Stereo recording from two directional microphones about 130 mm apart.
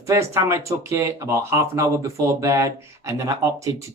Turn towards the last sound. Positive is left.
turn(degrees=-25)  # may be behind; listen again after turning